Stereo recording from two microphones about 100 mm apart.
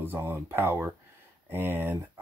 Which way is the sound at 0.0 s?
20° right (ahead or behind).